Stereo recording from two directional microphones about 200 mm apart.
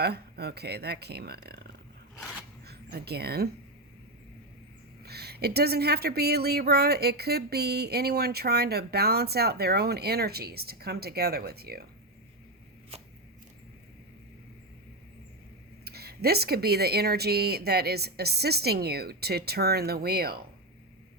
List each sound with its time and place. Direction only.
0.0 s speech: 55° right (ahead or behind)
2.6 s speech: 55° right (ahead or behind)
5.0 s speech: 55° right (ahead or behind)
15.8 s speech: 50° right (ahead or behind)